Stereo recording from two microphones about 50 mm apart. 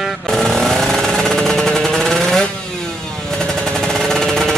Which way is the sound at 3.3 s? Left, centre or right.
Centre.